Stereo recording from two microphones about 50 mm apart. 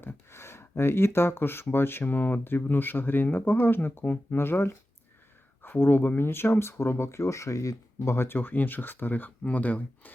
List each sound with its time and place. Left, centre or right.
0.0 s speech: left
5.6 s speech: left
9.4 s speech: left